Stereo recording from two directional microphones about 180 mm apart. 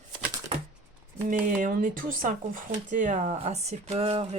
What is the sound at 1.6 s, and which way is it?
Speech, 50° right (ahead or behind).